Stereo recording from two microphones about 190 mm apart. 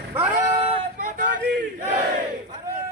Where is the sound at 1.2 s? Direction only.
45° right (ahead or behind).